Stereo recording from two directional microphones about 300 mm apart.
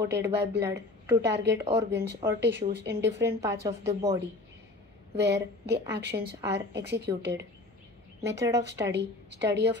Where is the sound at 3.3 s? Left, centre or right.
Centre.